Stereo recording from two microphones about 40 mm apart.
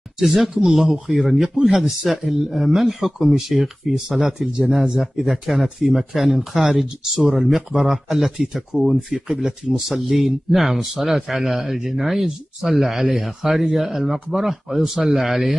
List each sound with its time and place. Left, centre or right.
0.7 s speech: centre